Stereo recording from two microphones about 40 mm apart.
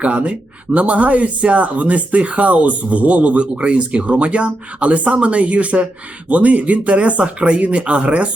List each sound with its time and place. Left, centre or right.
0.0 s speech: right